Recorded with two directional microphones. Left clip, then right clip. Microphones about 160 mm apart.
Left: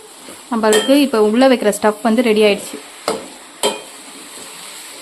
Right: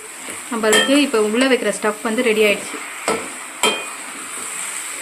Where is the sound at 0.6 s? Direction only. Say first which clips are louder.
Left 2 dB; 60° left (ahead or behind); by 2.6 s 80° left.